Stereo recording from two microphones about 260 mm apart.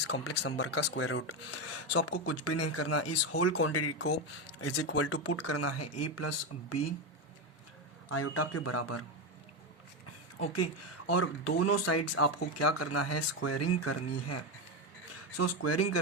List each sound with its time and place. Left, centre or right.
0.3 s speech: left
8.1 s speech: left
10.5 s speech: left